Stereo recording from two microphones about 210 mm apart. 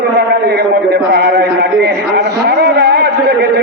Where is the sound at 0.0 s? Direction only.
50° right (ahead or behind).